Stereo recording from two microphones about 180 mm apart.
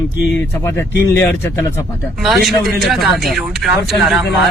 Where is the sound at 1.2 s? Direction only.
15° left (ahead or behind).